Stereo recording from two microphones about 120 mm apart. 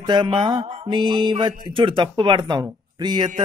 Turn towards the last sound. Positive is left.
turn(degrees=-35)  # may be behind; listen again after turning